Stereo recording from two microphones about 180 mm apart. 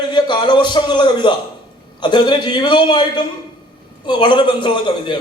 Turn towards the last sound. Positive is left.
turn(degrees=25)  # may be behind; listen again after turning